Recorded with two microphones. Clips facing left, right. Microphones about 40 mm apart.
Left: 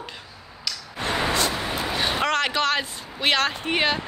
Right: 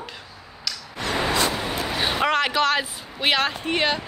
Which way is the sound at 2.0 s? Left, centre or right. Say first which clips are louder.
Right 2 dB; centre.